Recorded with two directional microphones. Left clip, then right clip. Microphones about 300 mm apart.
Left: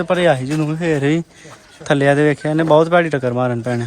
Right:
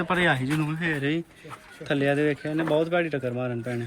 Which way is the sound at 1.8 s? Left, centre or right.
Left.